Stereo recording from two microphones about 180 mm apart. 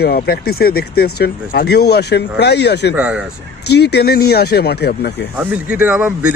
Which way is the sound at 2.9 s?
5° right (ahead or behind).